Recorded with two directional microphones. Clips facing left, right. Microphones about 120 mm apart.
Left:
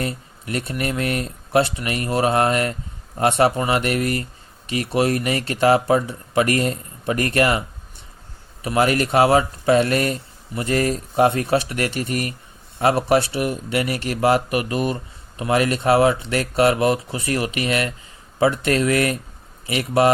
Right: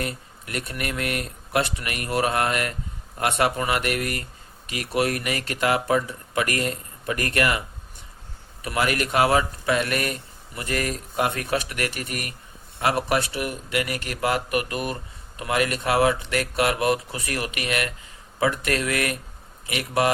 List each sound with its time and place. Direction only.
0.0 s speech: 30° left (ahead or behind)
8.6 s speech: 30° left (ahead or behind)